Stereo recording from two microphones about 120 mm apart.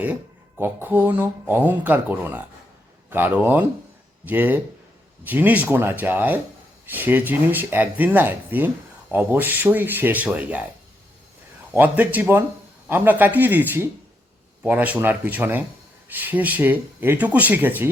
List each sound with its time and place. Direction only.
0.6 s speech: 15° right (ahead or behind)
11.7 s speech: 15° right (ahead or behind)